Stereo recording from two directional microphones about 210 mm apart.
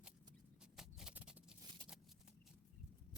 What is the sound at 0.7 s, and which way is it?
Patter, 5° right (ahead or behind).